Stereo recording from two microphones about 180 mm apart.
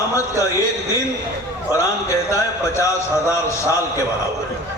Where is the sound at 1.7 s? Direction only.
15° left (ahead or behind).